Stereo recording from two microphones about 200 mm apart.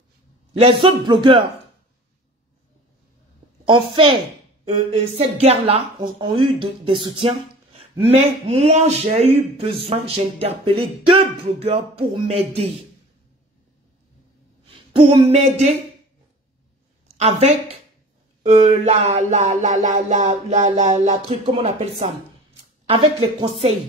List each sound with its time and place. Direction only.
0.5 s a man's voice: 30° right (ahead or behind)
3.6 s speech: 25° right (ahead or behind)
11.6 s music: 30° right (ahead or behind)
14.7 s speech: 25° right (ahead or behind)
17.2 s music: 30° right (ahead or behind)
22.8 s speech: 25° right (ahead or behind)